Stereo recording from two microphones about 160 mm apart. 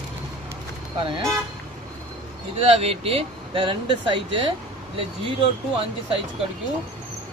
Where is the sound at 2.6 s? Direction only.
40° right (ahead or behind).